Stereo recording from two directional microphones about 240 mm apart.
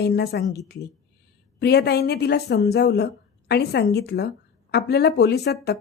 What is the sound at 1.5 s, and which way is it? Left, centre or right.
A woman's voice, left.